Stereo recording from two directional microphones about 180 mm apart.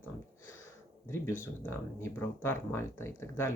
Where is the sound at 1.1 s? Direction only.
15° left (ahead or behind).